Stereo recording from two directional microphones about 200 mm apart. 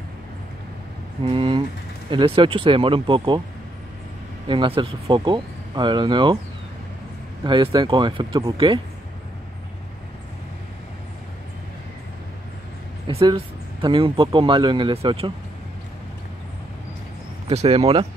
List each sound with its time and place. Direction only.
1.2 s speech: 25° right (ahead or behind)
4.5 s speech: 25° right (ahead or behind)
7.4 s speech: 25° right (ahead or behind)
13.0 s speech: 25° right (ahead or behind)
17.5 s speech: 30° right (ahead or behind)